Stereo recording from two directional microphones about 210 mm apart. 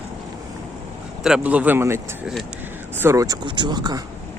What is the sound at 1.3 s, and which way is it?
Speech, 5° right (ahead or behind).